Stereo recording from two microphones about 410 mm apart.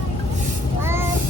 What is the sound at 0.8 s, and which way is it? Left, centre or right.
Vehicle, centre.